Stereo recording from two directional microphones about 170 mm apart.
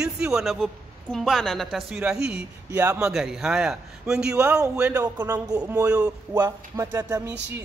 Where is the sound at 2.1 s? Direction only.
75° right (ahead or behind).